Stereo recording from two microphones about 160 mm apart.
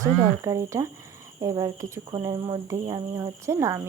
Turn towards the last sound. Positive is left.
turn(degrees=-20)  # may be behind; listen again after turning